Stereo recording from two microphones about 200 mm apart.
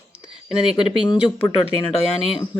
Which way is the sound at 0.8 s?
25° left (ahead or behind).